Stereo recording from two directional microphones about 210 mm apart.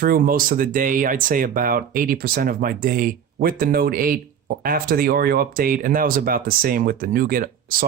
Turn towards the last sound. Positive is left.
turn(degrees=-40)  # may be behind; listen again after turning